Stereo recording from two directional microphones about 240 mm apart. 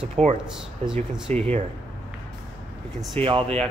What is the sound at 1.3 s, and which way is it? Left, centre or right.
Speech, centre.